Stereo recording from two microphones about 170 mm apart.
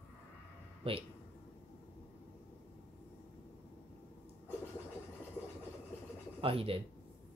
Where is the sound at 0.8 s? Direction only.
35° right (ahead or behind).